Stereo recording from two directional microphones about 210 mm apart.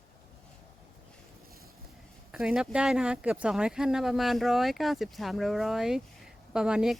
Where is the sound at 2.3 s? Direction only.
5° right (ahead or behind).